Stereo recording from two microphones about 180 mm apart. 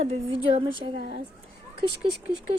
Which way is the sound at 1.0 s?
65° right (ahead or behind).